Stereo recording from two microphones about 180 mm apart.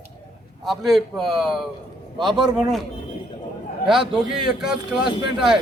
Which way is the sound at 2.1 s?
25° right (ahead or behind).